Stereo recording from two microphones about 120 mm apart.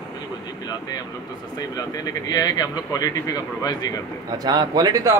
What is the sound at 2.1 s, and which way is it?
Speech, 35° left (ahead or behind).